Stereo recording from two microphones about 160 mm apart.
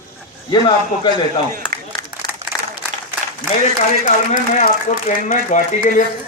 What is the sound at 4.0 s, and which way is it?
A man's voice, 50° left (ahead or behind).